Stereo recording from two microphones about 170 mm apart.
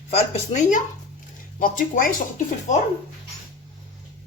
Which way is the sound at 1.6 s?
55° left (ahead or behind).